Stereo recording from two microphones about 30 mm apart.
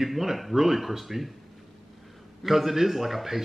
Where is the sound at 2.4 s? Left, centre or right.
Centre.